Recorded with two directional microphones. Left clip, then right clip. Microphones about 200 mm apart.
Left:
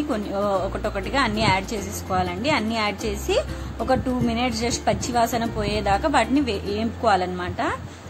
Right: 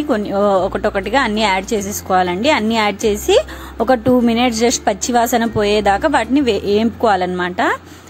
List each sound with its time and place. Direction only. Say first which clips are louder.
0.1 s a woman's voice: right 10 dB; 30° right (ahead or behind)